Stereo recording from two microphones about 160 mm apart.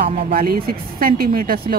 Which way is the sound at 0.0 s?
65° right (ahead or behind).